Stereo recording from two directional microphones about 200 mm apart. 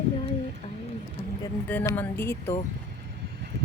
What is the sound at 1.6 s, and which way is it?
Speech, 10° left (ahead or behind).